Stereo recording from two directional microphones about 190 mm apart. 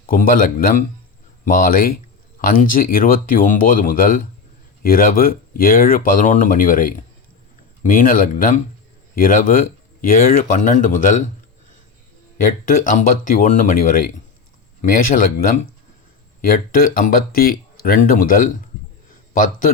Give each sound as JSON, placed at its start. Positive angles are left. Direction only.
{"t": 0.1, "sound": "speech", "side_deg": 45}
{"t": 12.6, "sound": "a man's voice", "side_deg": 45}